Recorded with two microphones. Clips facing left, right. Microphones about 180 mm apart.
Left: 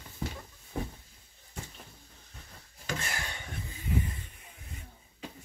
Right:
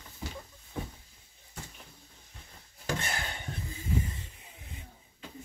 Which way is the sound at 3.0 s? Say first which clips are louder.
Right 2 dB; 25° right (ahead or behind).